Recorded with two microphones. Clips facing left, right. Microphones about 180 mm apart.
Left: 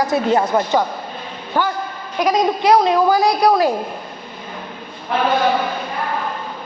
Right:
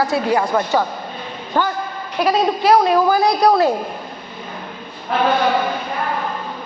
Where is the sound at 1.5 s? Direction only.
10° left (ahead or behind).